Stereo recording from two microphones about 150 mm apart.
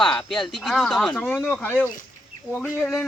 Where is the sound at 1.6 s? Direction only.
15° left (ahead or behind).